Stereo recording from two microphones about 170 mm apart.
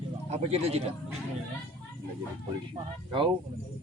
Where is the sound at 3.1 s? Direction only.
30° right (ahead or behind).